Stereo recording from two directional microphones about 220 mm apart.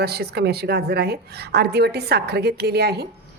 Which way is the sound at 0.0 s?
45° right (ahead or behind).